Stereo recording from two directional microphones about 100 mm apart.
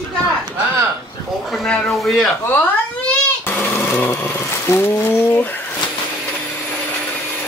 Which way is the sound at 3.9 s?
20° left (ahead or behind).